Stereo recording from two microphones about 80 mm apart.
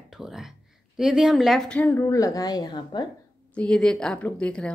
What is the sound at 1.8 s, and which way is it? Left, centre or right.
Speech, left.